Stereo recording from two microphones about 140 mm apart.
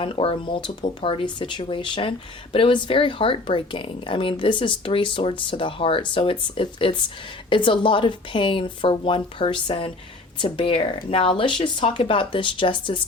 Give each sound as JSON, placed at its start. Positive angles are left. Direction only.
{"t": 0.0, "sound": "speech", "side_deg": 40}